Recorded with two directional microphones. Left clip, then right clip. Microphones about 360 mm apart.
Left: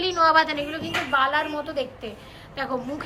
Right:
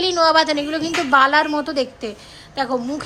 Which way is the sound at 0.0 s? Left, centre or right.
Centre.